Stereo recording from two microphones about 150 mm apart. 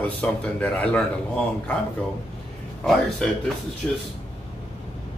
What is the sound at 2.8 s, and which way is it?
Speech, centre (ahead or behind).